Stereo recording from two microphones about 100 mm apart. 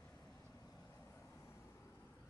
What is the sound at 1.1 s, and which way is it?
Vehicle, 25° left (ahead or behind).